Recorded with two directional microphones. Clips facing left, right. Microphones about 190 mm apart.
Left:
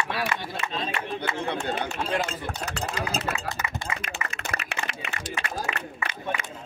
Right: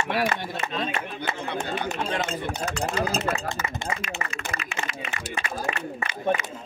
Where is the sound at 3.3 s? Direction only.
40° right (ahead or behind).